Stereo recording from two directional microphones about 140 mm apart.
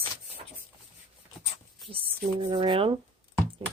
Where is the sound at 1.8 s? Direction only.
40° right (ahead or behind).